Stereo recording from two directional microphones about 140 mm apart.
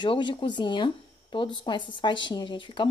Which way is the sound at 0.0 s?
35° left (ahead or behind).